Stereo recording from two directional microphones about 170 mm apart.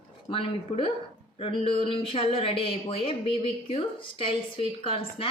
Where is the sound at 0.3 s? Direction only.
35° left (ahead or behind).